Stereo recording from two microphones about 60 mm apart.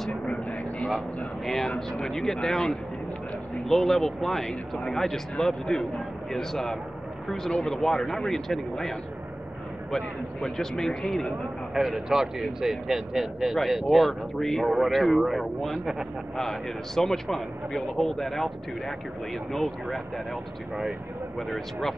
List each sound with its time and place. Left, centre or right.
0.3 s vehicle: centre
0.8 s speech: centre
11.7 s speech: centre